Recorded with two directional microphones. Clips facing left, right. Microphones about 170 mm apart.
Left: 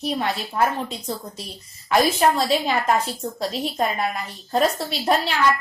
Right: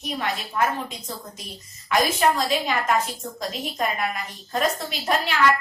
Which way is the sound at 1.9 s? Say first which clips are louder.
Left 3 dB; 30° left (ahead or behind).